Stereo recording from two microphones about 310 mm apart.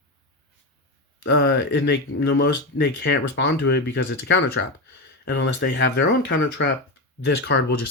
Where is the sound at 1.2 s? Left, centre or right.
Left.